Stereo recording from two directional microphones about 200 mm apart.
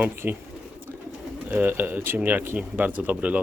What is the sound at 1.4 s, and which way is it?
Speech, 10° right (ahead or behind).